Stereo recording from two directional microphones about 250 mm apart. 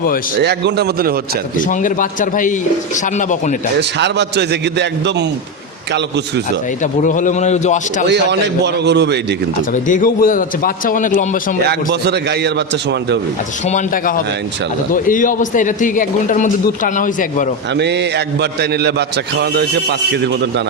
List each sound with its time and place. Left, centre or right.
0.3 s a man's voice: right
1.6 s speech: left
3.8 s a man's voice: right
7.0 s a man's voice: left
8.0 s a man's voice: right
9.7 s speech: left
11.7 s a man's voice: right
13.7 s speech: left
17.7 s a man's voice: right